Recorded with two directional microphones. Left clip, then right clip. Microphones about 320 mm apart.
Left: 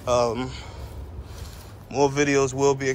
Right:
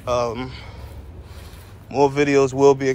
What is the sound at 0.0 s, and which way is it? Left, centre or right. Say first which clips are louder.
Speech: even; centre.